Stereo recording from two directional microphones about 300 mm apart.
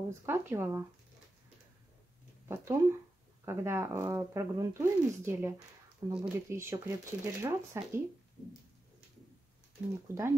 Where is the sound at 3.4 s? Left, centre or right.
Centre.